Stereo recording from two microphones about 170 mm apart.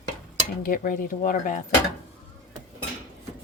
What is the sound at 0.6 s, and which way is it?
Speech, 55° left (ahead or behind).